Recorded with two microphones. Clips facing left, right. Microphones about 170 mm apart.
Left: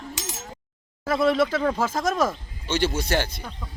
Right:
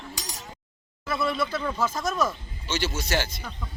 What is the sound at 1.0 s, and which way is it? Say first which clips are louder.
Speech: left 7 dB; 90° left.